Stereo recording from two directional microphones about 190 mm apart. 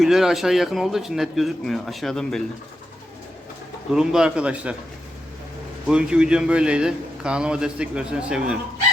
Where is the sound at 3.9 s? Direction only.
5° right (ahead or behind).